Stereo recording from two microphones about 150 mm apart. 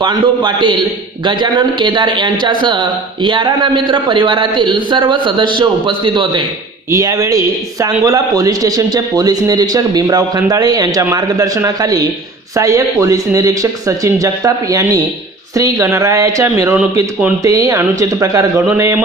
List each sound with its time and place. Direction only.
0.0 s speech: 30° right (ahead or behind)
6.9 s a man's voice: 20° right (ahead or behind)